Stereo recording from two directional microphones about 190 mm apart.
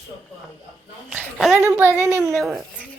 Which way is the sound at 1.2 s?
Centre (ahead or behind).